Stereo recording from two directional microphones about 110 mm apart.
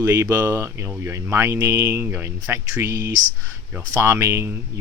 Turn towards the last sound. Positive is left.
turn(degrees=-25)  # may be behind; listen again after turning